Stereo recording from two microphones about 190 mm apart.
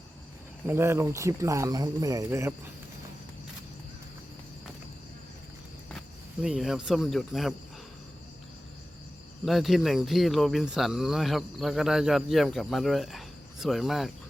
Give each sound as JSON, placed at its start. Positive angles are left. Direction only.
{"t": 0.7, "sound": "speech", "side_deg": -15}
{"t": 6.4, "sound": "speech", "side_deg": -5}
{"t": 9.4, "sound": "speech", "side_deg": 0}